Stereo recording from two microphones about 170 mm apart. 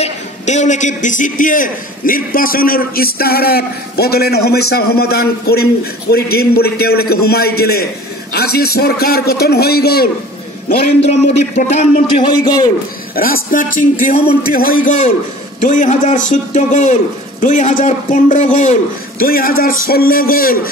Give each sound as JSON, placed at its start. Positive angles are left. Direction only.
{"t": 0.0, "sound": "a man's voice", "side_deg": 45}
{"t": 11.0, "sound": "speech", "side_deg": 40}
{"t": 12.2, "sound": "a man's voice", "side_deg": 25}
{"t": 13.1, "sound": "a man's voice", "side_deg": 60}